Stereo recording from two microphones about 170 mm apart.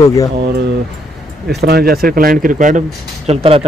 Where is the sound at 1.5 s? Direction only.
70° right (ahead or behind); by 2.8 s 50° right (ahead or behind).